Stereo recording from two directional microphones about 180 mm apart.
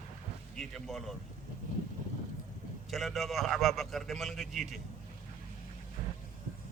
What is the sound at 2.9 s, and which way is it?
A man's voice, centre (ahead or behind).